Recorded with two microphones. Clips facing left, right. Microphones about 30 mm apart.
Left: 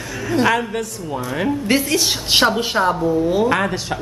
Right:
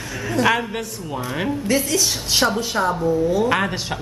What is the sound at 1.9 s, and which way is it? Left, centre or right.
Speech, left.